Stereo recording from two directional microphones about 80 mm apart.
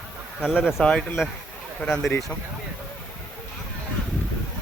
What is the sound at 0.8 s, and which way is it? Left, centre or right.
A man's voice, centre.